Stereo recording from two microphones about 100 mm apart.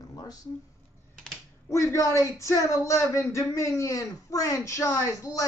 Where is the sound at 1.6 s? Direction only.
30° left (ahead or behind).